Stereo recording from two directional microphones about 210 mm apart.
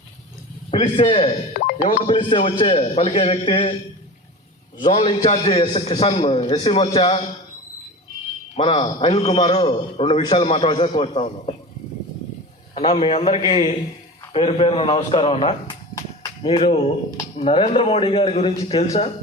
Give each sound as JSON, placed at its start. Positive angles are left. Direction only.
{"t": 0.7, "sound": "a man's voice", "side_deg": 25}
{"t": 4.8, "sound": "a man's voice", "side_deg": 25}
{"t": 8.5, "sound": "a man's voice", "side_deg": 25}
{"t": 12.7, "sound": "a man's voice", "side_deg": 20}
{"t": 16.0, "sound": "a sound", "side_deg": 25}
{"t": 17.3, "sound": "a man's voice", "side_deg": 30}